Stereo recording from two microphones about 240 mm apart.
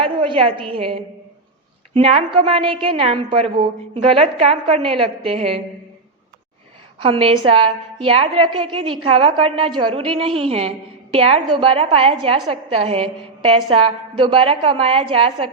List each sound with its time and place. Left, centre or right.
0.0 s a sound: right
0.7 s a woman's voice: right
7.0 s a woman's voice: right